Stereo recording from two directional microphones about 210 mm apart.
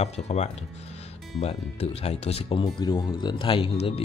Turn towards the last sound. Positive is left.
turn(degrees=25)  # may be behind; listen again after turning